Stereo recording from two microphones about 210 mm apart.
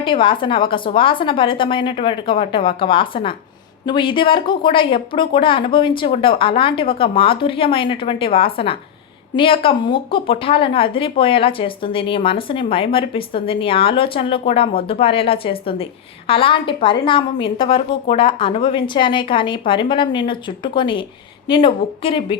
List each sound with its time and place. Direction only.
0.0 s a woman's voice: 25° left (ahead or behind)